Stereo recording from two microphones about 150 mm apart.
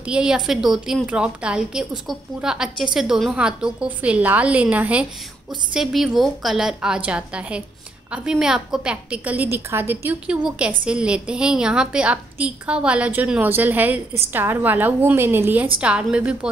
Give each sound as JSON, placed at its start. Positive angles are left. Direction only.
{"t": 0.0, "sound": "a woman's voice", "side_deg": -5}